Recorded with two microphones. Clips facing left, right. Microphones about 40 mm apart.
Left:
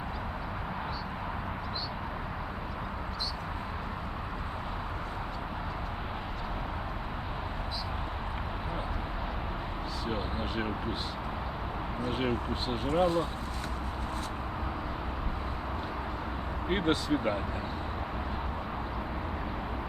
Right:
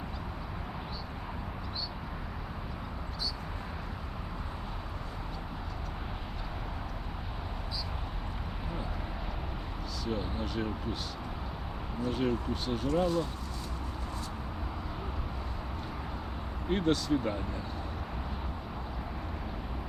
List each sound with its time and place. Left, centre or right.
10.1 s speech: left
12.0 s speech: left
16.6 s speech: left